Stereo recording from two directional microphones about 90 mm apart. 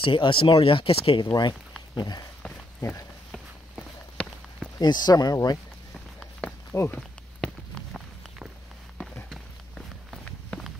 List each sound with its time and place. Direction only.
0.0 s speech: 70° left (ahead or behind)
2.0 s speech: 50° left (ahead or behind)
4.2 s a sound: 15° left (ahead or behind)
4.7 s speech: 50° left (ahead or behind)
6.7 s speech: 25° left (ahead or behind)
7.0 s a sound: 5° left (ahead or behind)
9.3 s run: centre (ahead or behind)
10.5 s walk: 15° left (ahead or behind)